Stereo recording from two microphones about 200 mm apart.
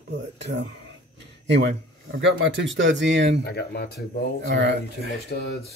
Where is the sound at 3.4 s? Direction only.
55° left (ahead or behind).